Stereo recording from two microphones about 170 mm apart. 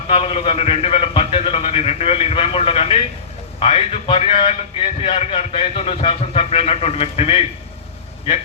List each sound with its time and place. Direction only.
0.1 s a man's voice: 35° left (ahead or behind)